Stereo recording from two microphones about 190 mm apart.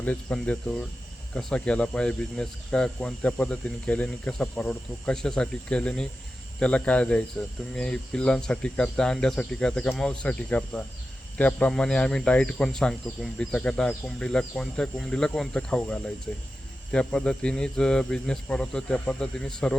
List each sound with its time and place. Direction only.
0.0 s speech: 5° left (ahead or behind)